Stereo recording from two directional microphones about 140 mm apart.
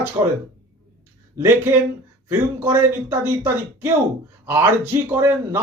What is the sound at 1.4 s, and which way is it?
Speech, 15° right (ahead or behind).